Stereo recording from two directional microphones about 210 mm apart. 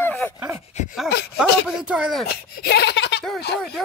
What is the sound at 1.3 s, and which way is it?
Speech, 5° right (ahead or behind).